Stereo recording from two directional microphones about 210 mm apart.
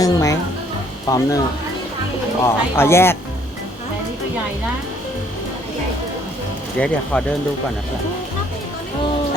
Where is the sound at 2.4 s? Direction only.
10° left (ahead or behind).